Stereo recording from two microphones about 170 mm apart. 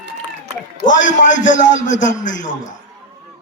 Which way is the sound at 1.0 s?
50° left (ahead or behind).